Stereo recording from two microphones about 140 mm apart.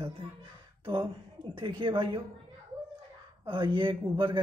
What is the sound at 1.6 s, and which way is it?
Speech, 35° right (ahead or behind).